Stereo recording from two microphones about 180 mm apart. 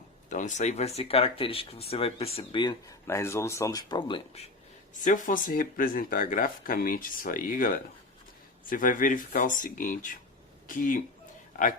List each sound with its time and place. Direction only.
0.3 s speech: 45° left (ahead or behind); by 2.7 s 25° left (ahead or behind)
3.1 s speech: 15° left (ahead or behind)
4.9 s speech: 45° left (ahead or behind)
8.7 s speech: 45° left (ahead or behind)